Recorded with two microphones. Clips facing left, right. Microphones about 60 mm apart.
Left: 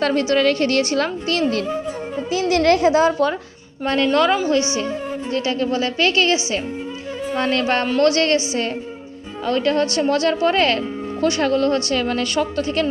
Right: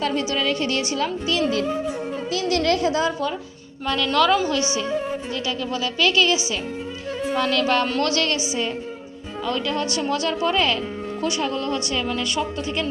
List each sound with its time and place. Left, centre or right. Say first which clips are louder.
0.0 s speech: left 6 dB; left
2.6 s a woman's voice: left 7 dB; left
3.8 s a woman's voice: left 3 dB; left
7.3 s a woman's voice: left 1 dB; left
9.5 s speech: left 6 dB; left